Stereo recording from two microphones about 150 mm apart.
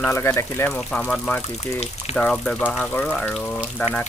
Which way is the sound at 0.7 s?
5° left (ahead or behind).